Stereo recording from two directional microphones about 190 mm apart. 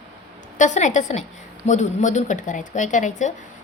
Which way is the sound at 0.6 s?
40° left (ahead or behind).